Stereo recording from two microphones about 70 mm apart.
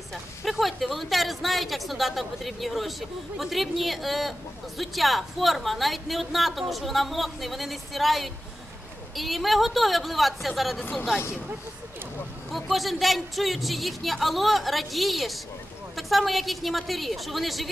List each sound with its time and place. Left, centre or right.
0.1 s a woman's voice: centre
10.8 s speech: left
12.4 s a woman's voice: centre